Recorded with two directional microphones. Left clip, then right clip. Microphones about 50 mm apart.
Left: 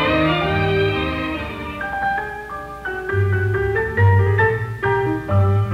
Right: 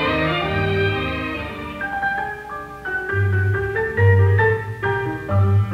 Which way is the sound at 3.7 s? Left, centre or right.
Centre.